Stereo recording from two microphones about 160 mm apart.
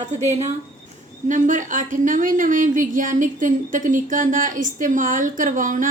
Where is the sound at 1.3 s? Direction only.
50° right (ahead or behind).